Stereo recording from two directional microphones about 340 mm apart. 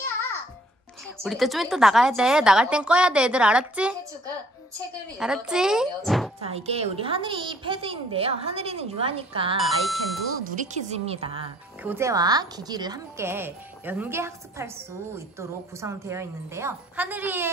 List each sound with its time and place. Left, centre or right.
1.2 s a woman's voice: centre
5.2 s a woman's voice: centre
6.4 s speech: centre
9.7 s a woman's voice: centre
10.3 s speech: right; by 17.5 s centre